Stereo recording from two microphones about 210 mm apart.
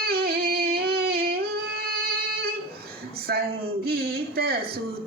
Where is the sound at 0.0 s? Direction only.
45° right (ahead or behind).